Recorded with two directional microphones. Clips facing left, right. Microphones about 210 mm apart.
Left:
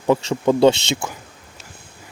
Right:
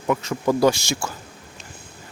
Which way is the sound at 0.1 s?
30° left (ahead or behind).